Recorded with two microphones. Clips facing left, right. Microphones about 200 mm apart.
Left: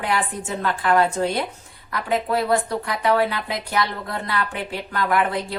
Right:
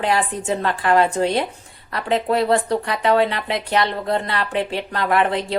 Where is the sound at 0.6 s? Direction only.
25° right (ahead or behind).